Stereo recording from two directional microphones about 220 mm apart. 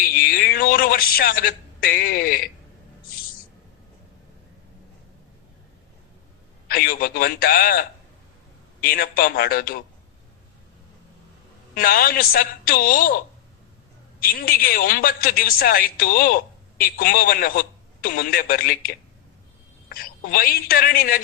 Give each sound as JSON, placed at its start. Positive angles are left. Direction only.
{"t": 0.0, "sound": "a man's voice", "side_deg": 40}
{"t": 6.7, "sound": "a woman's voice", "side_deg": 40}
{"t": 11.7, "sound": "a woman's voice", "side_deg": 40}
{"t": 19.9, "sound": "a woman's voice", "side_deg": 40}